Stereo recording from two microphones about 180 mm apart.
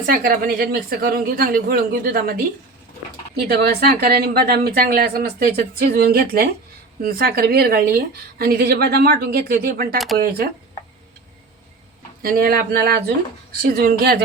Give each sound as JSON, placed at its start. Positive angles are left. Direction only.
{"t": 0.0, "sound": "a woman's voice", "side_deg": -50}
{"t": 3.5, "sound": "a woman's voice", "side_deg": -60}
{"t": 12.2, "sound": "a woman's voice", "side_deg": -55}